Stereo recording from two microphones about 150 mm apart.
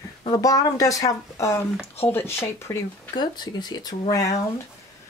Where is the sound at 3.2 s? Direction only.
30° left (ahead or behind).